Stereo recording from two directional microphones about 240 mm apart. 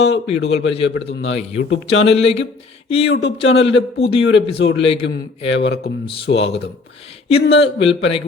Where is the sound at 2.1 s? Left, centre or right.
Left.